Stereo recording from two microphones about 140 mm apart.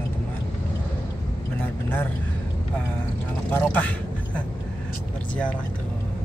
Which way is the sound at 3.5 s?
10° left (ahead or behind).